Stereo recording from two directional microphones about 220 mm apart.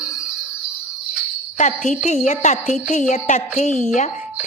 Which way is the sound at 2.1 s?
30° left (ahead or behind).